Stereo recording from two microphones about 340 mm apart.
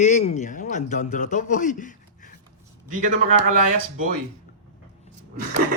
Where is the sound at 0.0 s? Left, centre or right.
Left.